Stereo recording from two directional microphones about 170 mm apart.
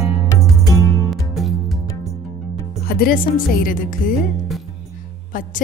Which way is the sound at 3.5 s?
55° left (ahead or behind).